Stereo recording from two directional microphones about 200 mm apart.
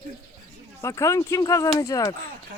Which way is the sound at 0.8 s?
15° left (ahead or behind).